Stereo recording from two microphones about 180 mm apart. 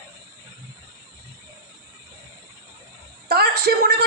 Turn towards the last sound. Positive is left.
turn(degrees=-65)  # may be behind; listen again after turning